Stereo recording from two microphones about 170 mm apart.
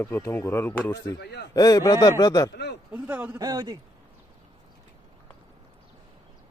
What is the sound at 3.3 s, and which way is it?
Speech, 20° right (ahead or behind).